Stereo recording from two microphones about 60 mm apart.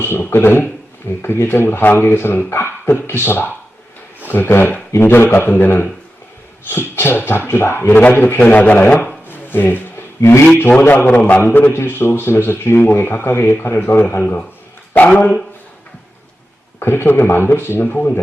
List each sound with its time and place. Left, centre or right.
0.0 s speech: left
9.2 s wood: left
10.2 s speech: left
10.8 s speech: left
11.7 s speech: left
14.2 s speech: left
16.8 s speech: left